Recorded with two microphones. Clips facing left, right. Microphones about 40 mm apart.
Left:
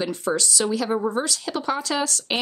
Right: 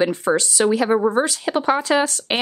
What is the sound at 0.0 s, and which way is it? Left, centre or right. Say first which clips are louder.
Speech: right 6 dB; right.